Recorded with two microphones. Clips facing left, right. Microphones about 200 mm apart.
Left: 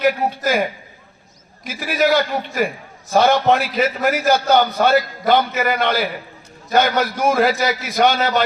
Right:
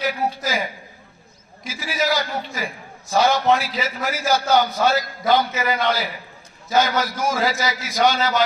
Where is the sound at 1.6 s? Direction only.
60° left (ahead or behind).